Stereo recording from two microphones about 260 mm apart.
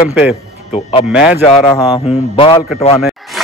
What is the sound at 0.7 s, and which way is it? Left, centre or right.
Speech, left.